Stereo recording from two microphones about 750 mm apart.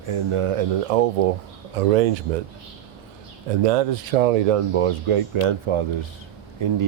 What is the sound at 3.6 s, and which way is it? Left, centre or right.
Speech, right.